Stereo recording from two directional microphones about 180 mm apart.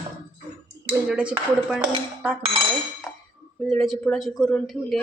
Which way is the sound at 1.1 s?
5° right (ahead or behind).